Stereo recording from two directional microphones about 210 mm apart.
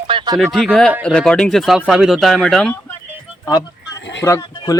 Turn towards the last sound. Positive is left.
turn(degrees=15)  # may be behind; listen again after turning